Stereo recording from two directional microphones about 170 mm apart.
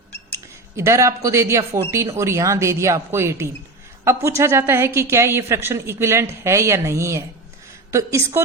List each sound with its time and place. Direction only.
0.8 s a woman's voice: 15° right (ahead or behind)